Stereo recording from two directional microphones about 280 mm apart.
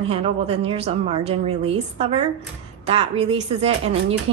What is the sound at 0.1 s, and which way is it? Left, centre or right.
A woman's voice, right.